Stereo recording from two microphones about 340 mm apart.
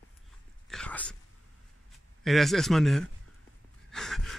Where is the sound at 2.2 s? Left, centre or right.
Centre.